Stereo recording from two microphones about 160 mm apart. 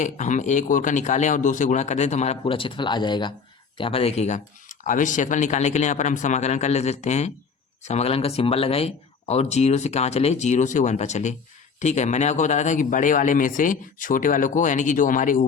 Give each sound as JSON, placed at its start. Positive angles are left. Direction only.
{"t": 0.0, "sound": "speech", "side_deg": 50}